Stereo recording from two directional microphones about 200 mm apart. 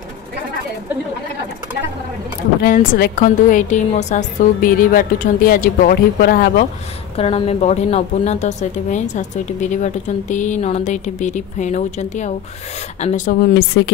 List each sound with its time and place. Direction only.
2.6 s a woman's voice: 45° left (ahead or behind)
7.2 s a woman's voice: 30° left (ahead or behind); by 13.9 s 55° left (ahead or behind)